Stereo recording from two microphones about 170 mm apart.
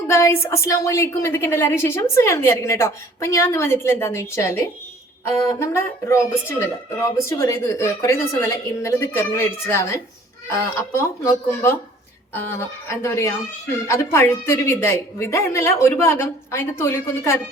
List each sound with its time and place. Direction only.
0.1 s a woman's voice: 15° left (ahead or behind)